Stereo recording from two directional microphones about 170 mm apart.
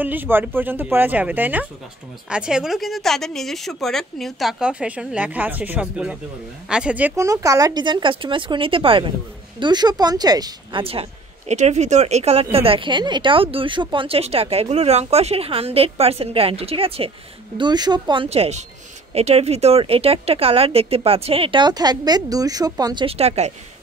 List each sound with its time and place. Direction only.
0.0 s speech: 10° right (ahead or behind)
23.0 s speech: 35° right (ahead or behind)